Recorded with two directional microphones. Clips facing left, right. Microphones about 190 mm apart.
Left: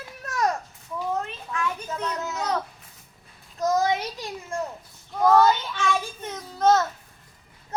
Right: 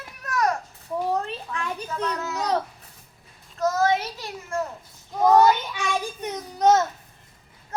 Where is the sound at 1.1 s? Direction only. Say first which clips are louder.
Right 2 dB; 35° right (ahead or behind).